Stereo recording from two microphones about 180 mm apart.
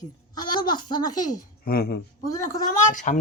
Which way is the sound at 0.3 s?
25° left (ahead or behind).